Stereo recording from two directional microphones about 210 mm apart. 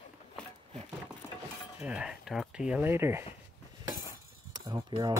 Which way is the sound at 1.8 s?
5° right (ahead or behind).